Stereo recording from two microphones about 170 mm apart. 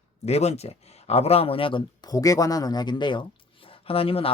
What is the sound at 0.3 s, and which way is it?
Speech, 40° left (ahead or behind).